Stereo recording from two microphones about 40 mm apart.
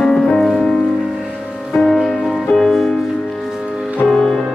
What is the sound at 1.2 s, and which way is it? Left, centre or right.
Music, centre.